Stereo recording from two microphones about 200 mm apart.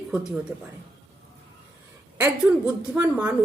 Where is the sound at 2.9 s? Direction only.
5° right (ahead or behind).